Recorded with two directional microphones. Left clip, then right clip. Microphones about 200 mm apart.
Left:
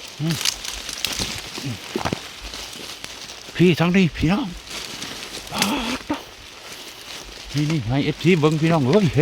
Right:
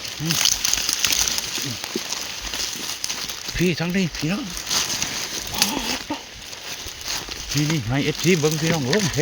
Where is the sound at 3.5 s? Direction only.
35° left (ahead or behind).